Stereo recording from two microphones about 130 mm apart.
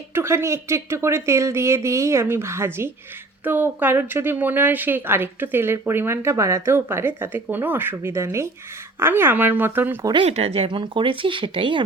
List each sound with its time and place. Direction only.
0.1 s a woman's voice: 20° right (ahead or behind)
10.2 s speech: 50° right (ahead or behind)